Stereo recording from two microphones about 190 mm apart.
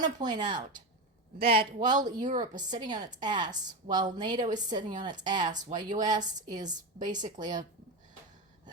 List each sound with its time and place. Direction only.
0.0 s a woman's voice: 20° right (ahead or behind)
1.4 s speech: 55° right (ahead or behind)
1.9 s a woman's voice: 20° right (ahead or behind)
4.8 s a woman's voice: 40° right (ahead or behind)
5.2 s a woman's voice: 20° right (ahead or behind)